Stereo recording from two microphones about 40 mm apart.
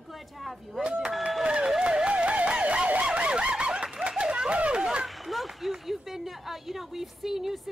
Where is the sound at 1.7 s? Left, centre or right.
Right.